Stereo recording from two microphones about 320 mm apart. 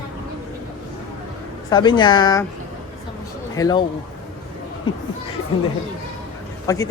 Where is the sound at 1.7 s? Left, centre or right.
Centre.